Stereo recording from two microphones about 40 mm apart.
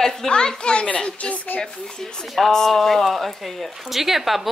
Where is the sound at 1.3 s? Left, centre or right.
Left.